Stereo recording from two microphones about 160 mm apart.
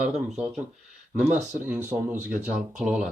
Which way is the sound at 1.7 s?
10° right (ahead or behind).